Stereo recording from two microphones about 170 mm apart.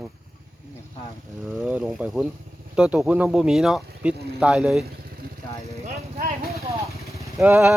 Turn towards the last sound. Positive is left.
turn(degrees=-10)  # may be behind; listen again after turning